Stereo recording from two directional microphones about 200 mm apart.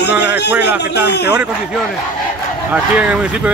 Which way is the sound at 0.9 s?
55° left (ahead or behind).